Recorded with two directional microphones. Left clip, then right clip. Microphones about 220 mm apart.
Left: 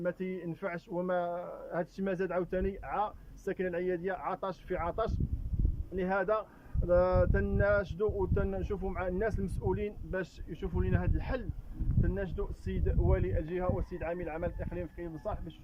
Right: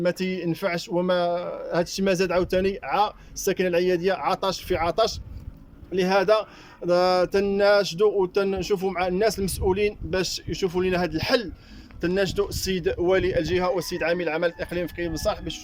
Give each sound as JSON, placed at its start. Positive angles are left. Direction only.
{"t": 0.0, "sound": "speech", "side_deg": -5}
{"t": 10.5, "sound": "speech", "side_deg": -20}
{"t": 12.0, "sound": "speech", "side_deg": -40}